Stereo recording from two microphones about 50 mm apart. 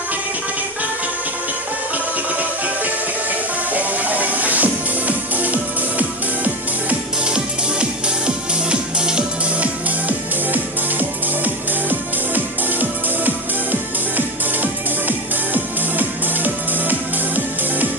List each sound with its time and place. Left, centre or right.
3.7 s music: right
7.2 s music: centre
9.8 s music: right
13.2 s music: right